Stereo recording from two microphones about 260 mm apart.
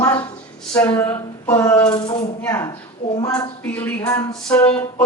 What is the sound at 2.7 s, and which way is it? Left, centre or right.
Speech, left.